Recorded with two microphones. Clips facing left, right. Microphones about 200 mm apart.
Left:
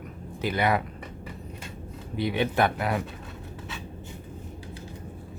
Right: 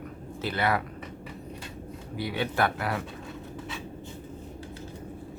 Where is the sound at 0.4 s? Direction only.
15° left (ahead or behind).